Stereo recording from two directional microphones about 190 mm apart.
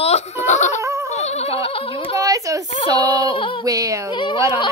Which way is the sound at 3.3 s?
25° left (ahead or behind).